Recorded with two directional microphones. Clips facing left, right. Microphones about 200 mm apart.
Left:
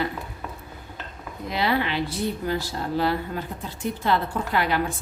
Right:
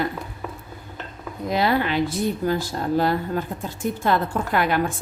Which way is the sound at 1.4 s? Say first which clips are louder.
Right 3 dB; 45° right (ahead or behind).